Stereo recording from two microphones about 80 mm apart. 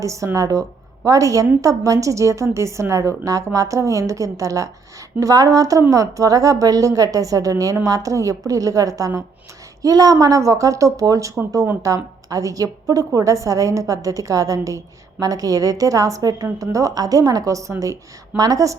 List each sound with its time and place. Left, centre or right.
0.0 s a woman's voice: right
11.3 s a woman's voice: right
11.8 s a woman's voice: right